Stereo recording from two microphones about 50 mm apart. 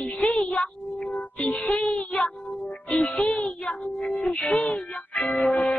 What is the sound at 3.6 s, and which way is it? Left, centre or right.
Child singing, left.